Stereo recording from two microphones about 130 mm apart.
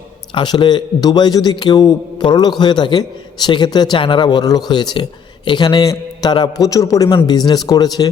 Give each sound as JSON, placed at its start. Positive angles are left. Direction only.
{"t": 0.3, "sound": "a man's voice", "side_deg": 35}